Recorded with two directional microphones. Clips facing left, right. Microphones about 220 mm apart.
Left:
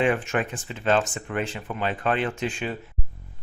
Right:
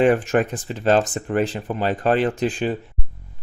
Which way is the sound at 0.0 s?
40° right (ahead or behind).